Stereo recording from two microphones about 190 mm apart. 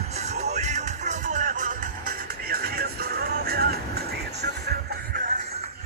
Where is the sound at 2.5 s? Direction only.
55° right (ahead or behind).